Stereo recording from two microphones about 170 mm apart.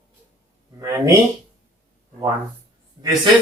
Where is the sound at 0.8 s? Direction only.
20° right (ahead or behind).